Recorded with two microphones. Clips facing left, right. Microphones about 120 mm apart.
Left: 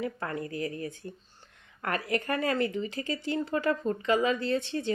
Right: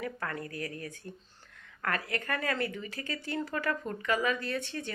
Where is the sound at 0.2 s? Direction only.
25° left (ahead or behind).